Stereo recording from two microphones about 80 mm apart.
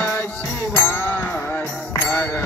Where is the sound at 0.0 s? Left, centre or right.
Left.